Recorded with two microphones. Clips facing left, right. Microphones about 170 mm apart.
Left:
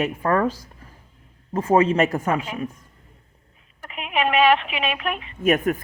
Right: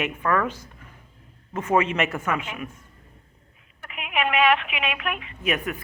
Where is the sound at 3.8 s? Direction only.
35° left (ahead or behind).